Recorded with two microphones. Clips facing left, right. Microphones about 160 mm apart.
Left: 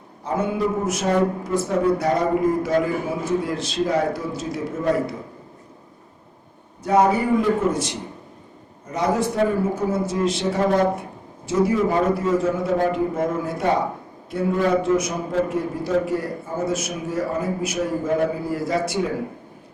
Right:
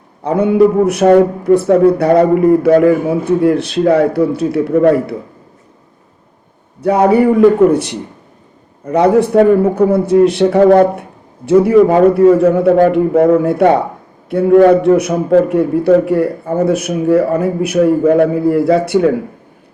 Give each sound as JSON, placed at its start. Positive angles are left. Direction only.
{"t": 0.2, "sound": "a man's voice", "side_deg": -65}
{"t": 6.8, "sound": "a man's voice", "side_deg": -65}